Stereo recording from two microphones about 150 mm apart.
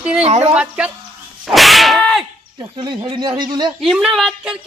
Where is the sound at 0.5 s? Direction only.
10° right (ahead or behind).